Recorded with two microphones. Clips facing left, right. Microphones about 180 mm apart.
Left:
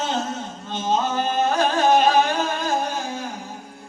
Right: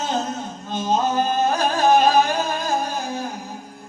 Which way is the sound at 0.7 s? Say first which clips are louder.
Right 2 dB; 40° right (ahead or behind).